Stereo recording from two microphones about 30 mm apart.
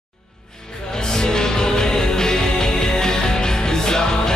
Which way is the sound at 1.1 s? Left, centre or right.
Left.